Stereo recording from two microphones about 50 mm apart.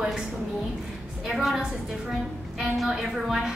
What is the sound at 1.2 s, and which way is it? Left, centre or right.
A woman's voice, centre.